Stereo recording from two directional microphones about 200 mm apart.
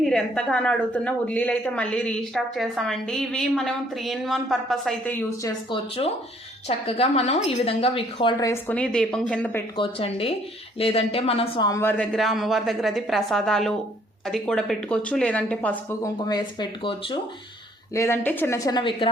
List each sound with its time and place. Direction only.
0.0 s speech: 5° left (ahead or behind)
5.4 s speech: 20° left (ahead or behind)
9.7 s speech: 25° left (ahead or behind)
11.7 s speech: 10° left (ahead or behind)
17.9 s speech: 15° left (ahead or behind)